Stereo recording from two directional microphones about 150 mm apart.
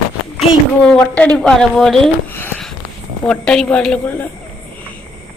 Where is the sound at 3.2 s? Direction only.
5° left (ahead or behind).